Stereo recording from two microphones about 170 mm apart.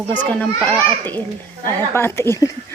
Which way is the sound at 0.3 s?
5° left (ahead or behind).